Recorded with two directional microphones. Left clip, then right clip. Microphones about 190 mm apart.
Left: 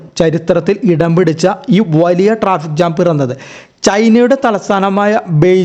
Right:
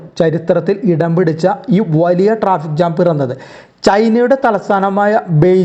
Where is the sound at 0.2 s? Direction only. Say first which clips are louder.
Left 1 dB; 20° left (ahead or behind).